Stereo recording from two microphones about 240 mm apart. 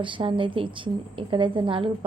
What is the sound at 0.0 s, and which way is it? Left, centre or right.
A woman's voice, right.